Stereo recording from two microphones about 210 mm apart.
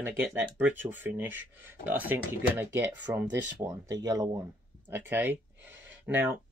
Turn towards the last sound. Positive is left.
turn(degrees=-10)  # may be behind; listen again after turning